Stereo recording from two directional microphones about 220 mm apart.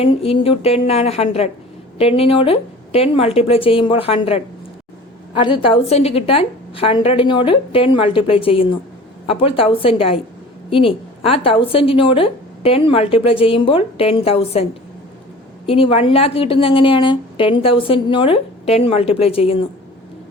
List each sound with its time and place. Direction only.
0.0 s speech: 25° left (ahead or behind)